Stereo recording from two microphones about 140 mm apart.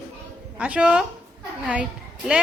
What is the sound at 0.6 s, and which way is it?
Speech, 10° right (ahead or behind).